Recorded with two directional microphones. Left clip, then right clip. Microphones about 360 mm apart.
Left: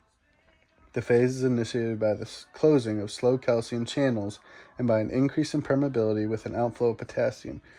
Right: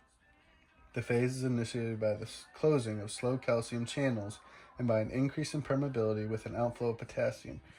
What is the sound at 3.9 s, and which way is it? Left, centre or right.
Speech, left.